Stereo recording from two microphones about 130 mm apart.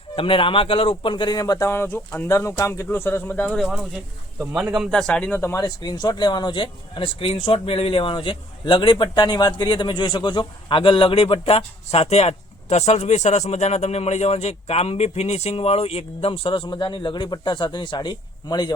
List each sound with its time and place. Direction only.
0.2 s speech: 45° left (ahead or behind); by 3.4 s 15° left (ahead or behind)
3.4 s speech: centre (ahead or behind); by 18.7 s 35° left (ahead or behind)